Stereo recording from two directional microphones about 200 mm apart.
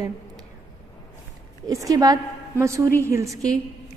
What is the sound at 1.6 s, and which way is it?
A woman's voice, 20° right (ahead or behind).